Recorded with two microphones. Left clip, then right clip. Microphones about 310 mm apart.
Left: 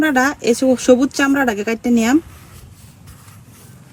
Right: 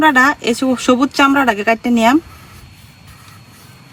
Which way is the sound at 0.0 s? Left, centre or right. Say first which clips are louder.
Right 5 dB; centre.